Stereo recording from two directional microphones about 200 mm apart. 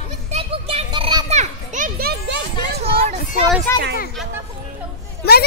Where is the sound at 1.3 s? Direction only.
35° right (ahead or behind).